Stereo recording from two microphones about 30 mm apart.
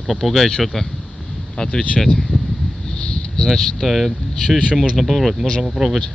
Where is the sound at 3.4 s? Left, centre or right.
Centre.